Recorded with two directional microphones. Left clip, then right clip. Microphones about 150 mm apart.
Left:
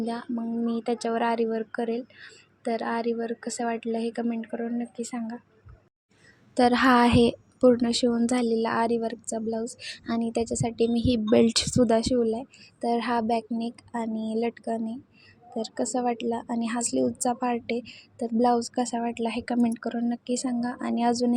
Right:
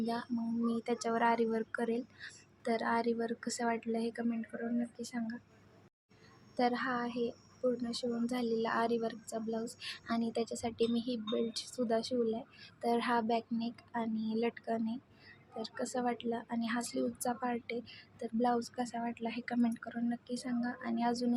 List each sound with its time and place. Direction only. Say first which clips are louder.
0.0 s speech: left 6 dB; 25° left (ahead or behind)
6.5 s a woman's voice: left 11 dB; 55° left (ahead or behind)
6.8 s a woman's voice: left 16 dB; 90° left
7.8 s a woman's voice: left 13 dB; 60° left (ahead or behind); by 11.0 s 40° left (ahead or behind)
11.0 s a woman's voice: left 15 dB; 65° left (ahead or behind); by 14.9 s 30° left (ahead or behind)
15.5 s a woman's voice: left 9 dB; 40° left (ahead or behind)